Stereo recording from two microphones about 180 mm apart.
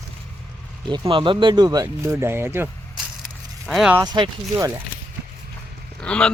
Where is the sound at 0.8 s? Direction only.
25° right (ahead or behind); by 4.0 s 5° right (ahead or behind).